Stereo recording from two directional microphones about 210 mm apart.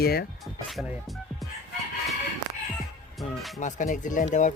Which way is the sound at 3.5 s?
35° left (ahead or behind).